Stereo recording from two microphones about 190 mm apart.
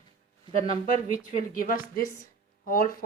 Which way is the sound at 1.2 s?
45° left (ahead or behind).